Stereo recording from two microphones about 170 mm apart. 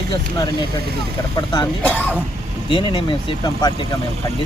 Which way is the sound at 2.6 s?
30° left (ahead or behind).